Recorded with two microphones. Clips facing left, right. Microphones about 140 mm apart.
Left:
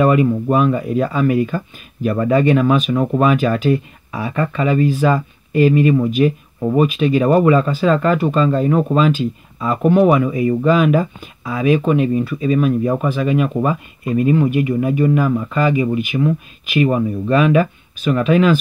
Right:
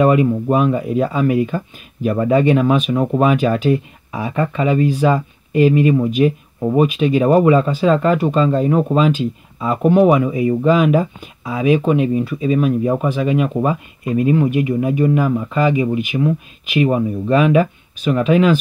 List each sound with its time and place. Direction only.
0.0 s speech: 20° right (ahead or behind)